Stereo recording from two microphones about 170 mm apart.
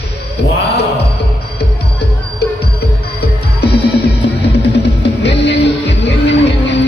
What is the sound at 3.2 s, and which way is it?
Music, 70° left (ahead or behind).